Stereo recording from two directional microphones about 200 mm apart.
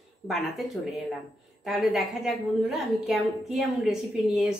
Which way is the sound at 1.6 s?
Centre (ahead or behind).